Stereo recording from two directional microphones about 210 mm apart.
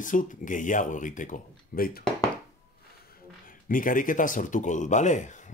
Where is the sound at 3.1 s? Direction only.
40° left (ahead or behind).